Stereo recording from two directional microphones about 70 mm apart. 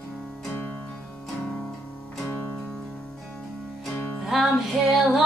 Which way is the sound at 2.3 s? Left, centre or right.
Left.